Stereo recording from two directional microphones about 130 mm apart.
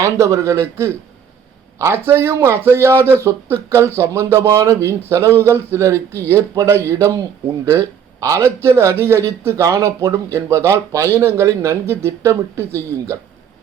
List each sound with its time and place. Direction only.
0.0 s speech: 20° right (ahead or behind)